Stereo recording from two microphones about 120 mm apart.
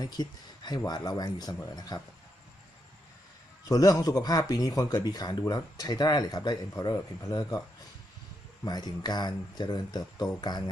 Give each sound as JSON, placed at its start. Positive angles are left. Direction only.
{"t": 0.0, "sound": "speech", "side_deg": 35}
{"t": 3.7, "sound": "speech", "side_deg": 30}
{"t": 8.6, "sound": "speech", "side_deg": 35}